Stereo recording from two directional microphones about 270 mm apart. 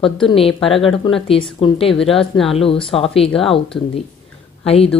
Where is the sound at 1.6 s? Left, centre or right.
Left.